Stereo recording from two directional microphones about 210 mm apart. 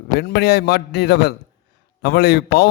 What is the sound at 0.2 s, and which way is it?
A man's voice, 50° left (ahead or behind).